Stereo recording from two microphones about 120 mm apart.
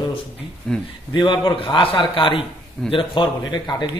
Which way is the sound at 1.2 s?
40° left (ahead or behind).